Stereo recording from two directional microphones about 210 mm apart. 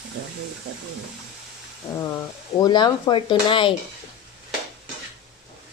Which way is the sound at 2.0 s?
15° left (ahead or behind).